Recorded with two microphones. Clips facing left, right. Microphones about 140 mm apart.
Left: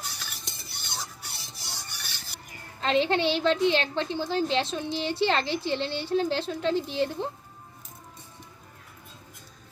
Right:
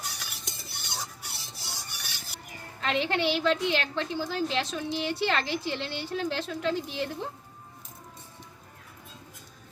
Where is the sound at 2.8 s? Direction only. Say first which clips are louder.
Left 4 dB; 30° left (ahead or behind).